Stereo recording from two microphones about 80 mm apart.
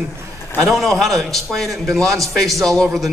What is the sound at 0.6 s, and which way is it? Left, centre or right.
A man's voice, centre.